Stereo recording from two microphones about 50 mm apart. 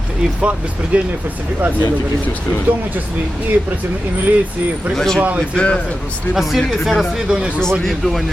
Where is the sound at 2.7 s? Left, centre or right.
Right.